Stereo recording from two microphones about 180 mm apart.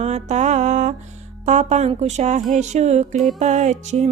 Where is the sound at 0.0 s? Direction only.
40° right (ahead or behind).